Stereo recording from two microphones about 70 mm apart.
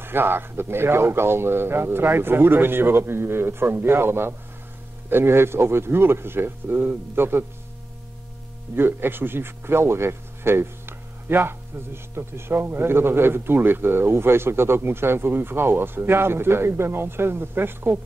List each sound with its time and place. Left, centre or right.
0.0 s speech: right
8.7 s speech: right